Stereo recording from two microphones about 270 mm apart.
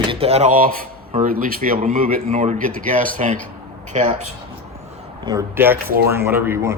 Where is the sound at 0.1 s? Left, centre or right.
Right.